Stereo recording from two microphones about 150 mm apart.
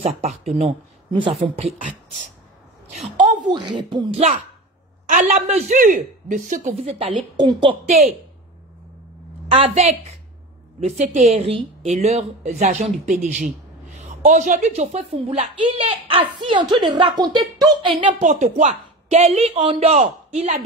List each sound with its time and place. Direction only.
0.3 s speech: 50° right (ahead or behind)
1.8 s speech: 60° right (ahead or behind)
3.5 s speech: 30° right (ahead or behind)
5.1 s speech: 60° right (ahead or behind); by 8.0 s 35° right (ahead or behind)
9.5 s a woman's voice: 40° right (ahead or behind)
18.0 s speech: 55° right (ahead or behind)